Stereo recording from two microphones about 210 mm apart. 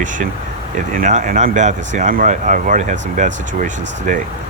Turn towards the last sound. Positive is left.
turn(degrees=-40)  # may be behind; listen again after turning